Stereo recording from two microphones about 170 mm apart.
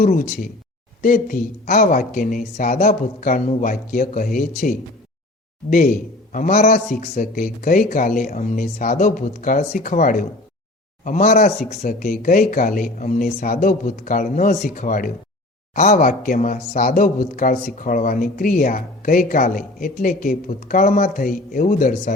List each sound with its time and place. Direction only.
0.0 s a man's voice: 55° left (ahead or behind)
6.3 s a man's voice: 50° left (ahead or behind)